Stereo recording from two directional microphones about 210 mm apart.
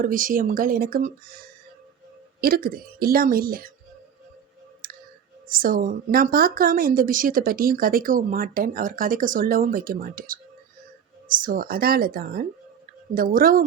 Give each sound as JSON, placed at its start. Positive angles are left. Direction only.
{"t": 0.0, "sound": "speech", "side_deg": -40}
{"t": 2.4, "sound": "a woman's voice", "side_deg": -45}
{"t": 4.8, "sound": "clicking", "side_deg": -45}
{"t": 5.5, "sound": "a woman's voice", "side_deg": -40}